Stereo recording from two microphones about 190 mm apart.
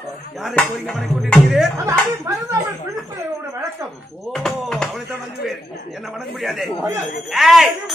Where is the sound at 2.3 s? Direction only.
15° right (ahead or behind).